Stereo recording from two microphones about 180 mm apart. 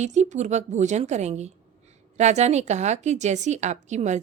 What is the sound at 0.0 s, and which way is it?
A woman's voice, 40° right (ahead or behind).